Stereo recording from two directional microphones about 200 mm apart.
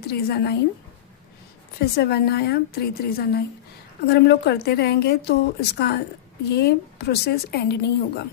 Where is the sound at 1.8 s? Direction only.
55° left (ahead or behind).